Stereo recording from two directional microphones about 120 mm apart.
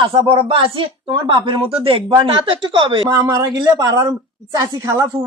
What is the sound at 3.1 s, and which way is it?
Speech, 25° right (ahead or behind).